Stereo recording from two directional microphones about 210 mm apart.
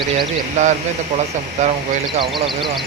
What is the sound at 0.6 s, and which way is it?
Speech, 35° right (ahead or behind).